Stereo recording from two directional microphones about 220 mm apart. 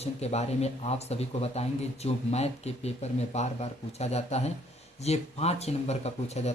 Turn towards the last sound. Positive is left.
turn(degrees=30)  # may be behind; listen again after turning